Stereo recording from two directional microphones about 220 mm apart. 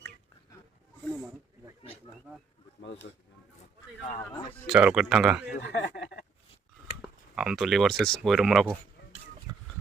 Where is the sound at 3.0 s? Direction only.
50° left (ahead or behind).